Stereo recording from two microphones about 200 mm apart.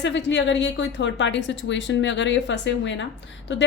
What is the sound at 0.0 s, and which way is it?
A woman's voice, 65° left (ahead or behind).